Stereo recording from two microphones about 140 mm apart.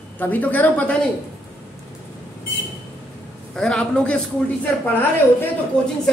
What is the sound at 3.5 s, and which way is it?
Speech, 5° left (ahead or behind).